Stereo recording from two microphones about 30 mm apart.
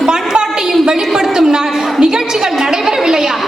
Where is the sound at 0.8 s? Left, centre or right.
Right.